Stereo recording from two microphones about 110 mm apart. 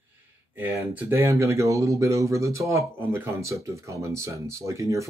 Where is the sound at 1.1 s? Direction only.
25° right (ahead or behind).